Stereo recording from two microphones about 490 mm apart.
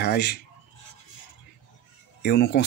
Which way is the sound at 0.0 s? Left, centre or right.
Centre.